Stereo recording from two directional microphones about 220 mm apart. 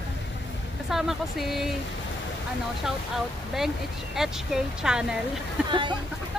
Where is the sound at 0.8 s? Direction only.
Centre (ahead or behind).